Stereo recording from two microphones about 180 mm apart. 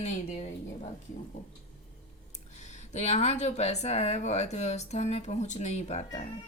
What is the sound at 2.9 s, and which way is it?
Speech, 35° left (ahead or behind).